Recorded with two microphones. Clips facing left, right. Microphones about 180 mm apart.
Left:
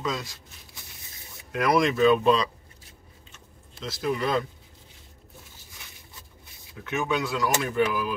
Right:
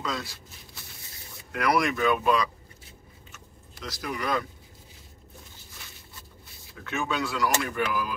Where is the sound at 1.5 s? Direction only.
20° left (ahead or behind).